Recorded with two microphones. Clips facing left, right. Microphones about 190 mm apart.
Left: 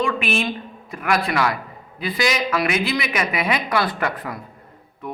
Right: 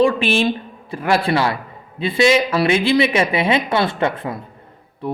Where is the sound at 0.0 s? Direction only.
30° right (ahead or behind).